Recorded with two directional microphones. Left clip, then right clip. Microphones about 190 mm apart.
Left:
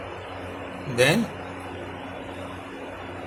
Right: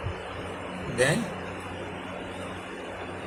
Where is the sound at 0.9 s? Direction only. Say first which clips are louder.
Left 4 dB; 35° left (ahead or behind).